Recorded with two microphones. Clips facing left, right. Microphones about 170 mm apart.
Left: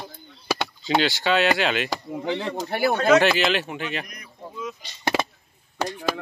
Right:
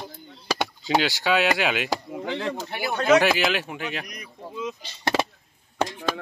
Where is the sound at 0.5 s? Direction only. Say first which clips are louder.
Even; 10° right (ahead or behind).